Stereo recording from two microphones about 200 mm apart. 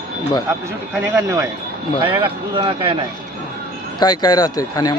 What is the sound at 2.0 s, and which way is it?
Speech, 25° right (ahead or behind).